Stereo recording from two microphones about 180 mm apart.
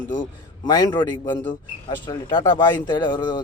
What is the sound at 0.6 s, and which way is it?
Speech, 25° left (ahead or behind).